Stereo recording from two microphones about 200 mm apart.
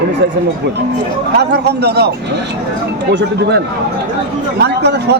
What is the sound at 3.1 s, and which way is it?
Speech, 60° right (ahead or behind).